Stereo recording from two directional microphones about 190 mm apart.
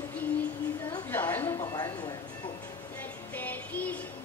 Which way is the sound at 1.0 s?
10° left (ahead or behind).